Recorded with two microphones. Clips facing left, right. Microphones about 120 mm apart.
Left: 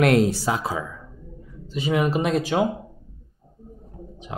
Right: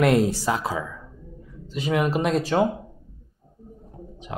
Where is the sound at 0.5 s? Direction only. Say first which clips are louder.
Even; 20° left (ahead or behind).